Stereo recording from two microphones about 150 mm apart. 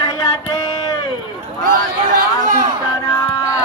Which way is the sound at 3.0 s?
25° left (ahead or behind).